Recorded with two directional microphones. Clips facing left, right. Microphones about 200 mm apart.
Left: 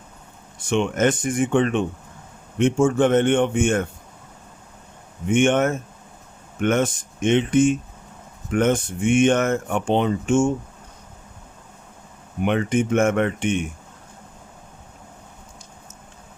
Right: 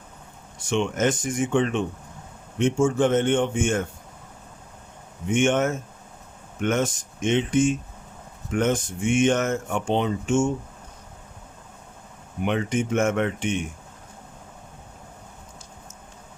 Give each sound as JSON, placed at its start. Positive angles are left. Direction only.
{"t": 0.7, "sound": "speech", "side_deg": 55}
{"t": 5.3, "sound": "speech", "side_deg": 55}
{"t": 12.4, "sound": "speech", "side_deg": 55}